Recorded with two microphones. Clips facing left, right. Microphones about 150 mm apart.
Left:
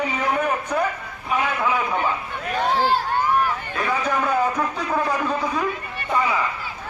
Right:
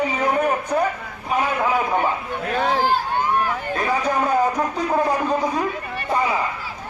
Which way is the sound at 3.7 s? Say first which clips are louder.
Right 2 dB; 40° right (ahead or behind).